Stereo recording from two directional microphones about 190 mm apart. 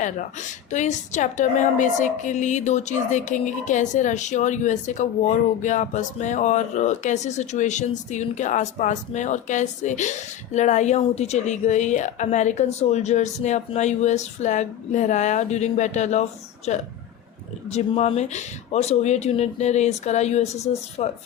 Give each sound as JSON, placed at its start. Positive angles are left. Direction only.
{"t": 0.0, "sound": "a woman's voice", "side_deg": 40}